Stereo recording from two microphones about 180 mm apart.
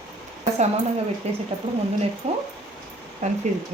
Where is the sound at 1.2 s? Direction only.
35° right (ahead or behind).